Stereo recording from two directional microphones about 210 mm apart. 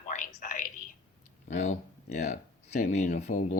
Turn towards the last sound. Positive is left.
turn(degrees=35)  # may be behind; listen again after turning